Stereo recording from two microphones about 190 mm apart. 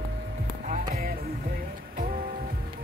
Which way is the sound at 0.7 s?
50° right (ahead or behind).